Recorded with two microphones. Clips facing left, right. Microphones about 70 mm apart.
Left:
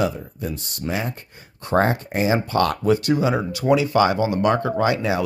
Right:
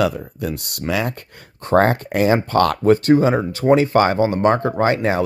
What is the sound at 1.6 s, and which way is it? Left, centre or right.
Speech, right.